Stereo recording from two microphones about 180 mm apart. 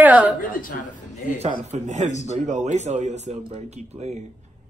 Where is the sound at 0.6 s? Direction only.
45° left (ahead or behind).